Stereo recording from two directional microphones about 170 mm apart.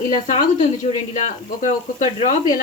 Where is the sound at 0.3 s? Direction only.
45° left (ahead or behind).